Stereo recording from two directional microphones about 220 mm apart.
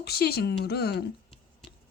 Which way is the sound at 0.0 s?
45° left (ahead or behind).